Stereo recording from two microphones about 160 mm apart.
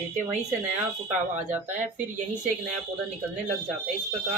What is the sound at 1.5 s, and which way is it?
Speech, 10° right (ahead or behind).